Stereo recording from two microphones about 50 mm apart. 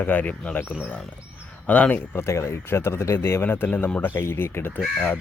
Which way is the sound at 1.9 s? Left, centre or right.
Left.